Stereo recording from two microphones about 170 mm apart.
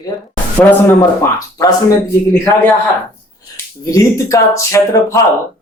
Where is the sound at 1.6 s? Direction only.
20° left (ahead or behind).